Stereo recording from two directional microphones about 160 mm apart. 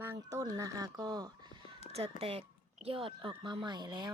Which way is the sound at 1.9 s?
40° right (ahead or behind).